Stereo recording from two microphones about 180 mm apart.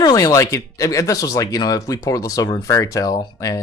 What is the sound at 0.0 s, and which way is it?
Speech, 20° left (ahead or behind).